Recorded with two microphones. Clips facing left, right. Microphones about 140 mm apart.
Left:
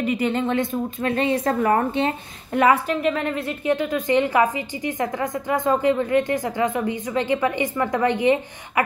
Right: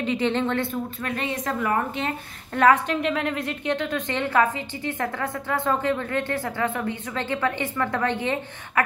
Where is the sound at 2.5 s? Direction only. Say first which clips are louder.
Left 1 dB; 10° left (ahead or behind).